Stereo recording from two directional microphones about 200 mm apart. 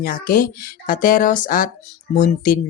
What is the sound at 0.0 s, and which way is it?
Speech, 45° left (ahead or behind).